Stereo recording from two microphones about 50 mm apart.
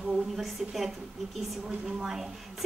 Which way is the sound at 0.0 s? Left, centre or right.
Centre.